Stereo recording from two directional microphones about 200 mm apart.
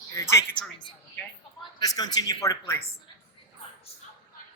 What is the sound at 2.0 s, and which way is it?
Speech, 20° left (ahead or behind).